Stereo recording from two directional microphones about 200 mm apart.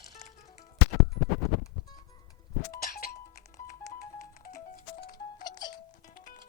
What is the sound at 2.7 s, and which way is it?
Music, 50° left (ahead or behind).